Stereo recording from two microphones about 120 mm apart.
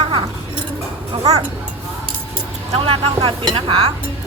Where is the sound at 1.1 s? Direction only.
55° right (ahead or behind).